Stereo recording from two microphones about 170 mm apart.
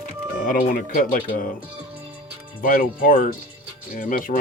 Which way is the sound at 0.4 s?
55° left (ahead or behind).